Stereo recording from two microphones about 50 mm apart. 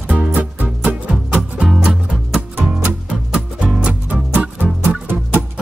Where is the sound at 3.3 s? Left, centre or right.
Right.